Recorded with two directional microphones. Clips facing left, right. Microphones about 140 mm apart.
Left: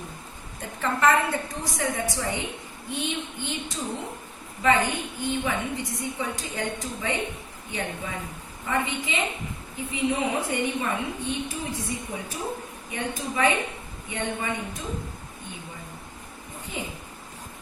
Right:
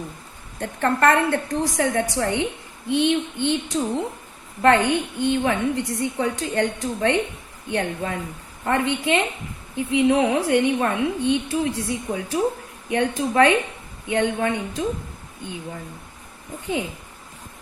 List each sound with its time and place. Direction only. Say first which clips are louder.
0.6 s a woman's voice: right 4 dB; 65° right (ahead or behind)